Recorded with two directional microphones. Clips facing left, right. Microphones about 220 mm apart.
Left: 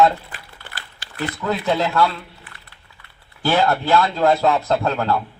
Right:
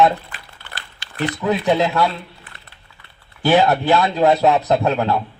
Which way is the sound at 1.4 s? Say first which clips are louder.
Right 3 dB; 15° right (ahead or behind).